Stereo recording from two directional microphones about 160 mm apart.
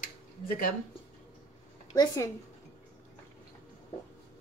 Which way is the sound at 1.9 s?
20° left (ahead or behind).